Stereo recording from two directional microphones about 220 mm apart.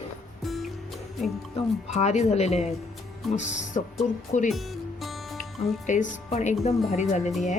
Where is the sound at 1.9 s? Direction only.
30° left (ahead or behind).